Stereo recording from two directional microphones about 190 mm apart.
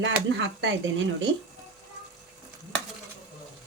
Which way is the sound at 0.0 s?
75° right (ahead or behind).